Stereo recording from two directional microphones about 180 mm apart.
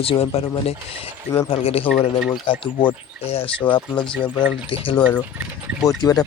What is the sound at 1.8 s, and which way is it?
Speech, centre (ahead or behind).